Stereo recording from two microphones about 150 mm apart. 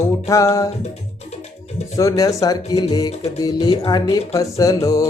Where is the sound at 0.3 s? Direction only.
20° left (ahead or behind).